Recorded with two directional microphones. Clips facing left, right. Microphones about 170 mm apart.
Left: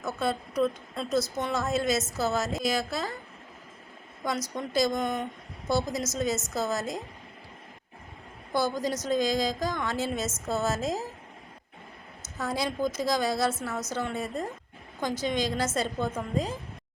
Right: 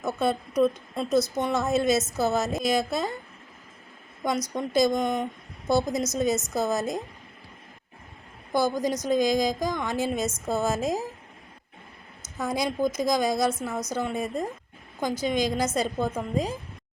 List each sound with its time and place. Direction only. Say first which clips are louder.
0.0 s speech: right 4 dB; 20° right (ahead or behind)
4.2 s a woman's voice: right 4 dB; 20° right (ahead or behind)
8.5 s a woman's voice: right 3 dB; 15° right (ahead or behind)
12.4 s a woman's voice: right 3 dB; 15° right (ahead or behind)